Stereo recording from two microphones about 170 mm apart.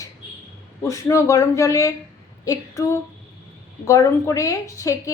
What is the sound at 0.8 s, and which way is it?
A woman's voice, 15° left (ahead or behind).